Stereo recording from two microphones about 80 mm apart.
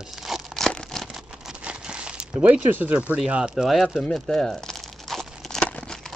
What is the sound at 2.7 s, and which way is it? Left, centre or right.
Speech, centre.